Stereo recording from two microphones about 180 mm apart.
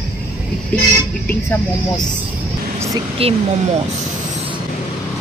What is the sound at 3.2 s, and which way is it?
Speech, 30° right (ahead or behind).